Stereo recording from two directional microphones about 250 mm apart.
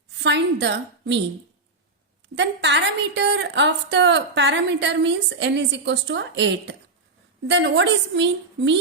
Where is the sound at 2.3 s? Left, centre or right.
Right.